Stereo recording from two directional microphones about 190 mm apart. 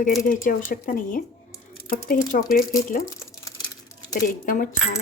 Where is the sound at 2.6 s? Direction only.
45° left (ahead or behind).